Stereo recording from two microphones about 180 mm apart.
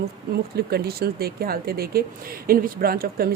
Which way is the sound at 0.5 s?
60° right (ahead or behind).